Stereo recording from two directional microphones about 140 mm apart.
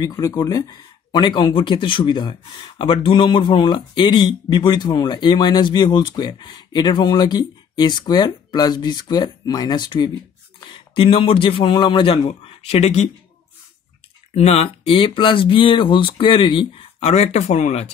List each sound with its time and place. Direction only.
0.0 s speech: 25° left (ahead or behind); by 13.1 s 50° left (ahead or behind)
14.3 s speech: 50° left (ahead or behind)